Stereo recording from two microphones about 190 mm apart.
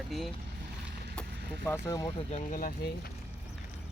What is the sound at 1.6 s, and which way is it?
Speech, 10° left (ahead or behind).